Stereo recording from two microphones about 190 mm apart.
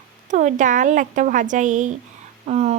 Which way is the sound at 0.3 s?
40° right (ahead or behind).